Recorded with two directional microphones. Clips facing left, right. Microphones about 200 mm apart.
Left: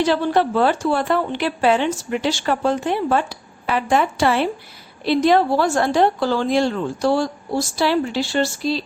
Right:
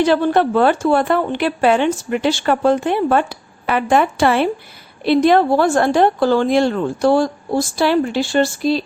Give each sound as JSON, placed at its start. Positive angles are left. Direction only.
{"t": 0.0, "sound": "a woman's voice", "side_deg": -55}